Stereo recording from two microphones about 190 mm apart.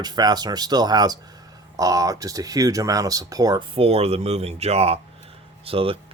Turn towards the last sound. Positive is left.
turn(degrees=-30)  # may be behind; listen again after turning